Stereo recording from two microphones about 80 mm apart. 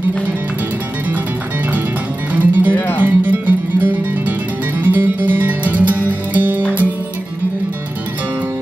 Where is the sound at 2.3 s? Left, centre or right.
Right.